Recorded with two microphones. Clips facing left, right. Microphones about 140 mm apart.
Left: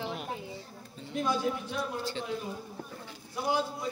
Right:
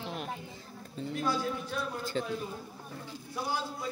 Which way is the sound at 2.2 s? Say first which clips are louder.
Right 3 dB; 45° right (ahead or behind).